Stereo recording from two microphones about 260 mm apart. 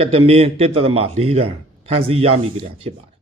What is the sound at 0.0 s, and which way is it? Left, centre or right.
A man's voice, right.